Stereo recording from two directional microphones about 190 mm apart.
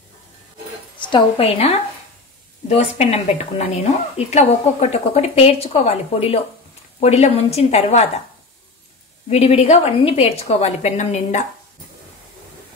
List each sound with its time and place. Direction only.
0.9 s a woman's voice: 25° left (ahead or behind)
9.3 s a woman's voice: 35° left (ahead or behind)